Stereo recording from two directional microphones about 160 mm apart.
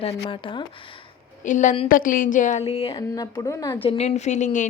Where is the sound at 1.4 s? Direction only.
50° left (ahead or behind).